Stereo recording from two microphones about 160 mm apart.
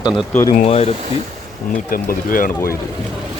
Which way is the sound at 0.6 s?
40° left (ahead or behind).